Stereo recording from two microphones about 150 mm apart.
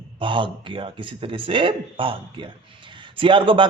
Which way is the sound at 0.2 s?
35° right (ahead or behind).